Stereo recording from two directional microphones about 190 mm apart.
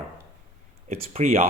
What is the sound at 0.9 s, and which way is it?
Speech, 35° right (ahead or behind).